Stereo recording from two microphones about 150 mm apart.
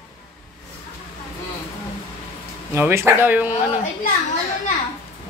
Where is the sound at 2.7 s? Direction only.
15° right (ahead or behind).